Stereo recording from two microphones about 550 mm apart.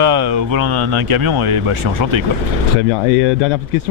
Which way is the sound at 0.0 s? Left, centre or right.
Right.